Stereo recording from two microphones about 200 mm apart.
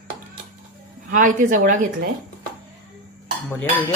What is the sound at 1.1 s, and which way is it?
Speech, 40° right (ahead or behind).